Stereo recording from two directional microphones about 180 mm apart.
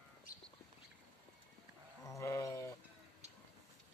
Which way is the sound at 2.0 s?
15° left (ahead or behind).